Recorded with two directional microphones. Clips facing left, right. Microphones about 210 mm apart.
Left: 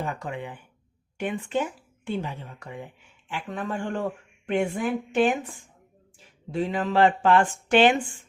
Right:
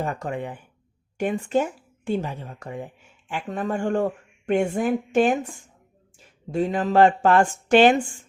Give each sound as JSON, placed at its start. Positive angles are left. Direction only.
{"t": 0.0, "sound": "speech", "side_deg": -45}
{"t": 6.5, "sound": "speech", "side_deg": -45}